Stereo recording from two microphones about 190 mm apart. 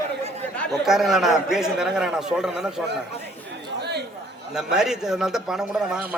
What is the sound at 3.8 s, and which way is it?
Chatter, 60° right (ahead or behind).